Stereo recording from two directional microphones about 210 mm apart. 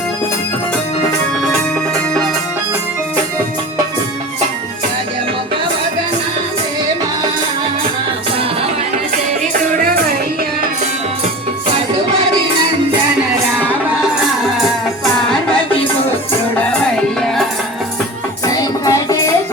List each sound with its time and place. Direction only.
18.4 s music: 15° left (ahead or behind)